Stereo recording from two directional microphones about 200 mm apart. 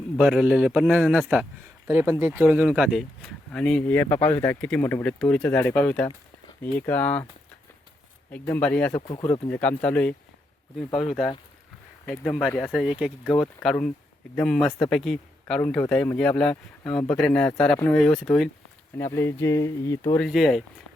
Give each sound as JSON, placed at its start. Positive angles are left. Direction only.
{"t": 0.2, "sound": "speech", "side_deg": -5}
{"t": 8.3, "sound": "speech", "side_deg": 10}
{"t": 9.0, "sound": "speech", "side_deg": 25}
{"t": 9.5, "sound": "speech", "side_deg": 5}
{"t": 12.5, "sound": "speech", "side_deg": 0}
{"t": 20.2, "sound": "speech", "side_deg": 0}